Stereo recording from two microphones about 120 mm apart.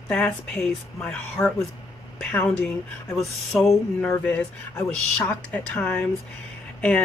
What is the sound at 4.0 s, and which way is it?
Speech, 10° left (ahead or behind).